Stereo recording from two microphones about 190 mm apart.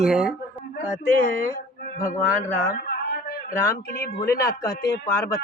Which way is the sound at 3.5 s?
15° left (ahead or behind).